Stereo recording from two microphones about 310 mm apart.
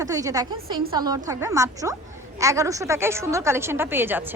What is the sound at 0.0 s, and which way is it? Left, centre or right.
Speech, centre.